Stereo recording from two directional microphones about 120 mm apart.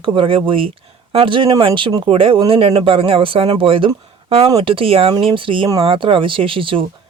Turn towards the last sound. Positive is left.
turn(degrees=-45)  # may be behind; listen again after turning